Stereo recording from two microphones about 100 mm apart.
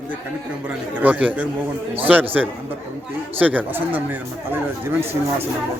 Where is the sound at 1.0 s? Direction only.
15° right (ahead or behind).